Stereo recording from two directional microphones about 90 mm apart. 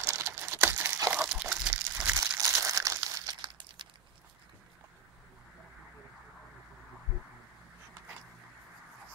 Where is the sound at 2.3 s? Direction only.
35° right (ahead or behind).